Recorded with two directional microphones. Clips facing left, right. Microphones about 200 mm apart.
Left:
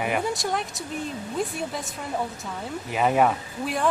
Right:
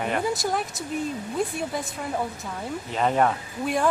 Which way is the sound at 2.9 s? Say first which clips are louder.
Left 1 dB; 10° left (ahead or behind).